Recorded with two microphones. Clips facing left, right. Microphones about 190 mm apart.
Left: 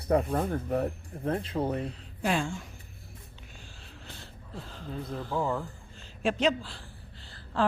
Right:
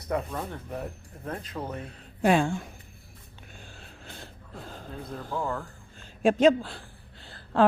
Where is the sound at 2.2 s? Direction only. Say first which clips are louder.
Right 7 dB; 55° right (ahead or behind).